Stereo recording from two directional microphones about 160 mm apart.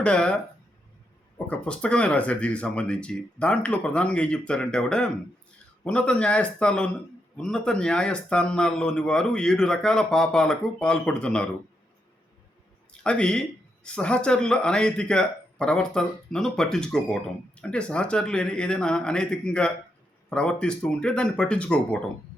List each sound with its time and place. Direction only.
0.0 s speech: 5° left (ahead or behind)
1.5 s speech: 5° left (ahead or behind)
12.9 s speech: 5° left (ahead or behind)